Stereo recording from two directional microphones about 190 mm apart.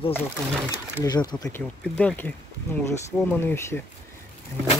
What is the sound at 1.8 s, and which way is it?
Speech, 5° left (ahead or behind).